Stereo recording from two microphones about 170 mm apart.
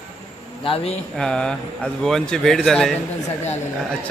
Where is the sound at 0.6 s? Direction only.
30° left (ahead or behind).